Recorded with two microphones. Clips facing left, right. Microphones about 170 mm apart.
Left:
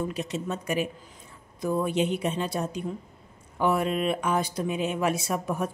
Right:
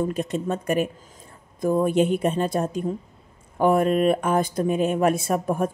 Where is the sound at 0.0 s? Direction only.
50° right (ahead or behind).